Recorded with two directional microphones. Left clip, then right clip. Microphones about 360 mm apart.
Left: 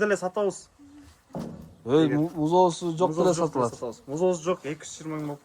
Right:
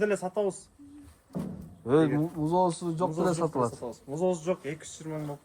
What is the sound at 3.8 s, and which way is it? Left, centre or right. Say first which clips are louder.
Speech: left 4 dB; left.